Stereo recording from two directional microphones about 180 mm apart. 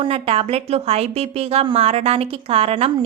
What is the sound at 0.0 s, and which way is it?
Speech, 30° right (ahead or behind).